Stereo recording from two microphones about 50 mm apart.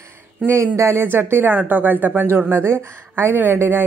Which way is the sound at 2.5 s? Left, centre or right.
Right.